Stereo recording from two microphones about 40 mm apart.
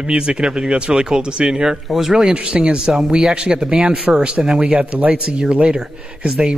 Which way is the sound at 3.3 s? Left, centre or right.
Right.